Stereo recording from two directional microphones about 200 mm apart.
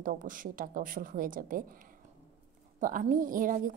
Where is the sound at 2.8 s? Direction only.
40° right (ahead or behind).